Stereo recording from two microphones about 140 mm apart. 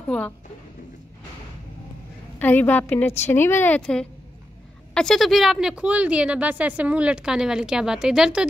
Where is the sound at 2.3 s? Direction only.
10° left (ahead or behind).